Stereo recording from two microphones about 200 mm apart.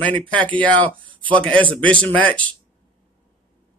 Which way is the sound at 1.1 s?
25° right (ahead or behind).